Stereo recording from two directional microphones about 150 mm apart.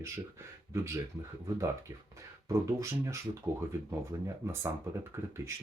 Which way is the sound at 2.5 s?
20° right (ahead or behind).